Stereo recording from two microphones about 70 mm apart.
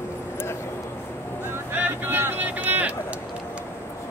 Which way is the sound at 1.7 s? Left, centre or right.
Right.